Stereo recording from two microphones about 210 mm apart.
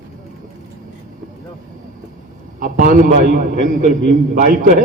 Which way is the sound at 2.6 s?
40° right (ahead or behind).